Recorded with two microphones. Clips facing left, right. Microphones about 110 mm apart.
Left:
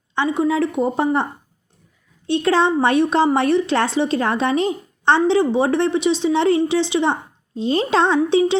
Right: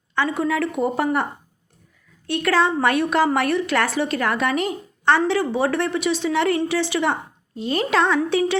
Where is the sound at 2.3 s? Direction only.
25° left (ahead or behind).